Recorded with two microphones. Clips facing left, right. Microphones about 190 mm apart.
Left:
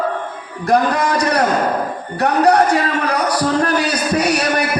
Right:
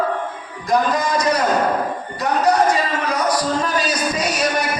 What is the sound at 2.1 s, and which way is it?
A man's voice, 65° left (ahead or behind).